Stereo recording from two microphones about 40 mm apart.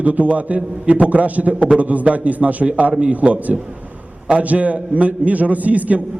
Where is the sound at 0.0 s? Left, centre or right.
Right.